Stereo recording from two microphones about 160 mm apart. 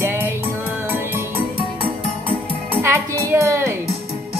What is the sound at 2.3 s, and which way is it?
Music, 15° right (ahead or behind).